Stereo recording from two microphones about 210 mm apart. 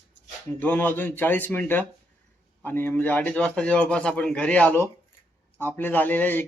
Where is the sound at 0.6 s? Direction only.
10° left (ahead or behind).